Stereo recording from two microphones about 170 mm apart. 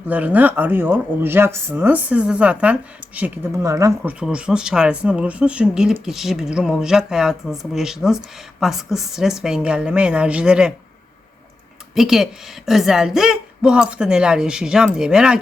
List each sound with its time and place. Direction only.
0.1 s speech: 10° right (ahead or behind)
4.2 s speech: 5° right (ahead or behind)
11.9 s speech: centre (ahead or behind)